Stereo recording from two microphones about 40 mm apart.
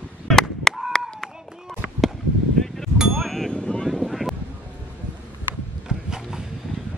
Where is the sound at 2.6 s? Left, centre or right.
Centre.